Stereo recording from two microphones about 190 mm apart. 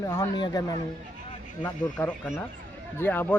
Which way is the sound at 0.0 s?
20° left (ahead or behind).